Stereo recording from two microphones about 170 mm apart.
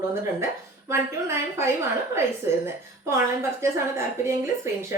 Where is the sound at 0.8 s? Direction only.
15° right (ahead or behind).